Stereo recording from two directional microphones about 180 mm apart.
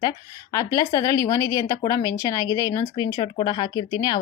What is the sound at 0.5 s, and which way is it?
Speech, 20° left (ahead or behind).